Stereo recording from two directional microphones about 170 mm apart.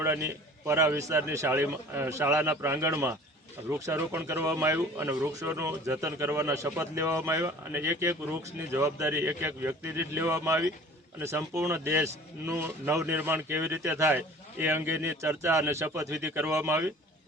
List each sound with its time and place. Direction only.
0.0 s speech: 15° right (ahead or behind)